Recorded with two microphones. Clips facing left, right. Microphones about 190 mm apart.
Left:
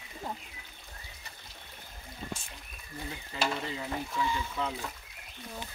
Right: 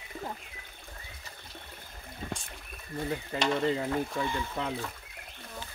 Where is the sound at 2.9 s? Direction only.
60° right (ahead or behind).